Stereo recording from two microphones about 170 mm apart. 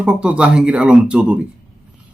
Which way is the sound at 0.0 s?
5° right (ahead or behind).